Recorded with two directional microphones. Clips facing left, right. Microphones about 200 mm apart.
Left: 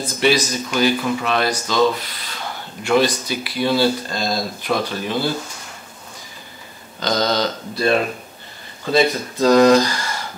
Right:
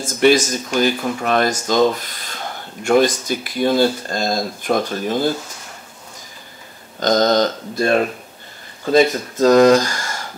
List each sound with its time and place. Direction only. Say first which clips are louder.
0.0 s speech: right 4 dB; 45° right (ahead or behind)
7.0 s speech: right 5 dB; 45° right (ahead or behind)